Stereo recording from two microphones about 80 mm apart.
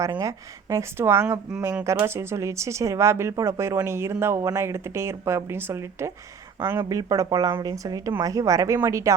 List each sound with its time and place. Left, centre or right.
0.2 s speech: right
6.8 s speech: right